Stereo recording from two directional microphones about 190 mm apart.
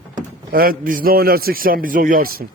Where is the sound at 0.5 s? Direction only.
50° right (ahead or behind).